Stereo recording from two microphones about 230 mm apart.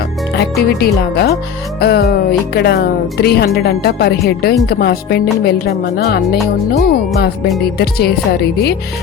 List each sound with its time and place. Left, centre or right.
0.3 s speech: left